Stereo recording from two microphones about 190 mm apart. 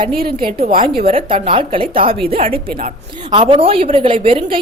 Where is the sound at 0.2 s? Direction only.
50° right (ahead or behind).